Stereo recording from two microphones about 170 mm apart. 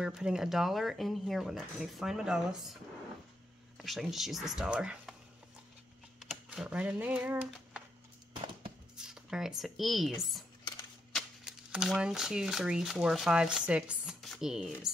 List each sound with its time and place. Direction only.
0.0 s speech: 5° right (ahead or behind)
3.7 s speech: centre (ahead or behind)
6.1 s speech: 5° right (ahead or behind)
8.3 s a sound: 30° right (ahead or behind)
8.9 s speech: 5° right (ahead or behind)
11.1 s speech: 5° right (ahead or behind)